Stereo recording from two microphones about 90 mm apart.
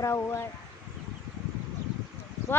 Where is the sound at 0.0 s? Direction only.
30° left (ahead or behind).